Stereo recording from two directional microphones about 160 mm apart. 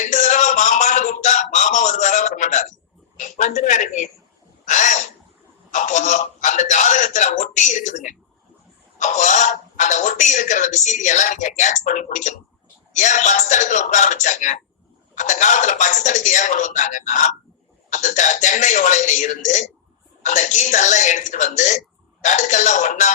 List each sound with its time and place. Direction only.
0.0 s a sound: 50° left (ahead or behind)
3.2 s speech: 50° left (ahead or behind)
4.6 s owl: 50° left (ahead or behind)
5.7 s speech: 50° left (ahead or behind)